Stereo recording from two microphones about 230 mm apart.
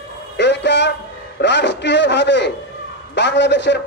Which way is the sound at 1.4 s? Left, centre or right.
Left.